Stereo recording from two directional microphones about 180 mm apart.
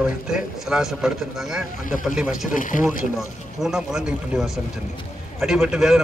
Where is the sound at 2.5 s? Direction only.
45° left (ahead or behind).